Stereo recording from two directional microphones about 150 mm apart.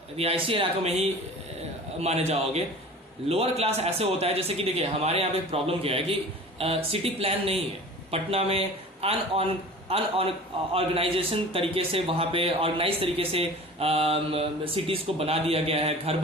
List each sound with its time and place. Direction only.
0.2 s a man's voice: 40° right (ahead or behind)